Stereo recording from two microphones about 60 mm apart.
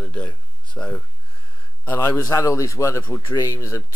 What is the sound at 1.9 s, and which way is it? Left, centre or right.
Speech, left.